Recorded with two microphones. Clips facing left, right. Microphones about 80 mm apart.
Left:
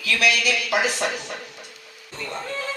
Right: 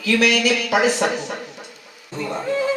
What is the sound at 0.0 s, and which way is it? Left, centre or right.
Speech, right.